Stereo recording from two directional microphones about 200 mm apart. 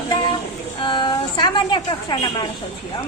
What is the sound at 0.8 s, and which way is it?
A woman's voice, 25° left (ahead or behind).